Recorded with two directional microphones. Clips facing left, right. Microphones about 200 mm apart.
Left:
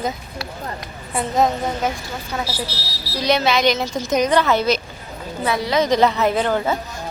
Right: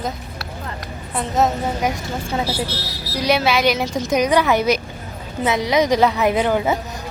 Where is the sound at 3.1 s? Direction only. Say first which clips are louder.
Even; 10° right (ahead or behind).